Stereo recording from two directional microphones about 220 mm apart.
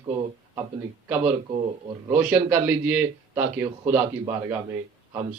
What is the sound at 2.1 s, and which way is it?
A man's voice, 10° right (ahead or behind).